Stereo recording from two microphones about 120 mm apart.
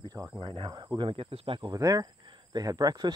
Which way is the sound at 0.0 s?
35° right (ahead or behind).